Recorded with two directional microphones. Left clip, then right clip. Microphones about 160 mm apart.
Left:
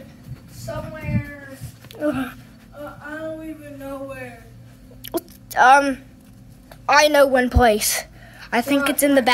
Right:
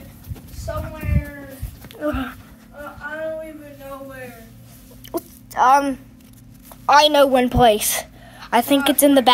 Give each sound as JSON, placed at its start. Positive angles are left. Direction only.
{"t": 2.0, "sound": "speech", "side_deg": 20}
{"t": 5.0, "sound": "a sound", "side_deg": 30}
{"t": 6.9, "sound": "a woman's voice", "side_deg": 10}
{"t": 7.2, "sound": "a woman's voice", "side_deg": 0}